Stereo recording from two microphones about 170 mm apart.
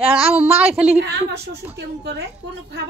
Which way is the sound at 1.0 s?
75° right (ahead or behind).